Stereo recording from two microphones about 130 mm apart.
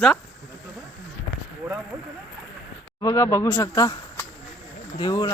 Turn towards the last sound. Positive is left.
turn(degrees=30)  # may be behind; listen again after turning